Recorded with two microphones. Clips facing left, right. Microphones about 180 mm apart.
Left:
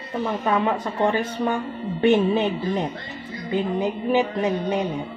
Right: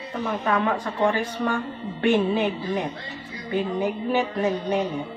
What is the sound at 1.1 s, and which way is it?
A woman's voice, 20° left (ahead or behind).